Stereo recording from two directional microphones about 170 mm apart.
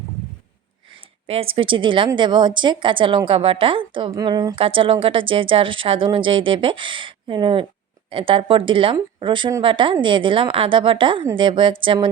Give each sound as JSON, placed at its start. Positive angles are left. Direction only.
{"t": 1.3, "sound": "a woman's voice", "side_deg": -35}